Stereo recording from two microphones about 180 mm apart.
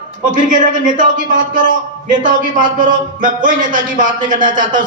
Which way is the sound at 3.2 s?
45° right (ahead or behind).